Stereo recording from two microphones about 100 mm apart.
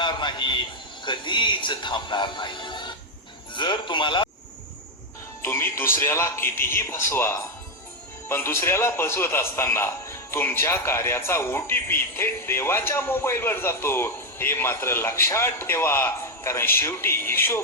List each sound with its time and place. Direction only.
0.0 s a man's voice: 50° left (ahead or behind)
5.4 s a man's voice: 25° left (ahead or behind)